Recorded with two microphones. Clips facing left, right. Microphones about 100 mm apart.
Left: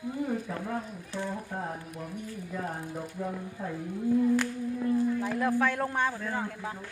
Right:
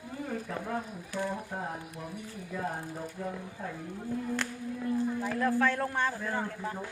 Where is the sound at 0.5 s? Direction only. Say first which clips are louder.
Left 1 dB; centre (ahead or behind).